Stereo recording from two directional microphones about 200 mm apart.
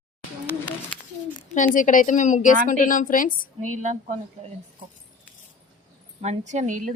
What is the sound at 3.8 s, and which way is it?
Speech, 35° right (ahead or behind).